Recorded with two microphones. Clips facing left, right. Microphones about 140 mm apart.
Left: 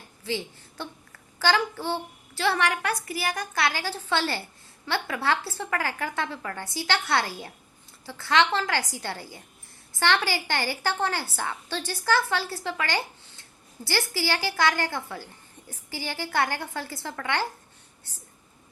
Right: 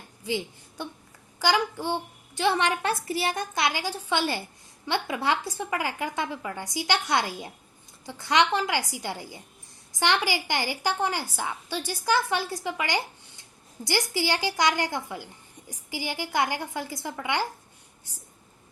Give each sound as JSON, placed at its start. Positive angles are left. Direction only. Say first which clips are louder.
{"t": 0.2, "sound": "a woman's voice", "louder": "right 1 dB", "side_deg": -15}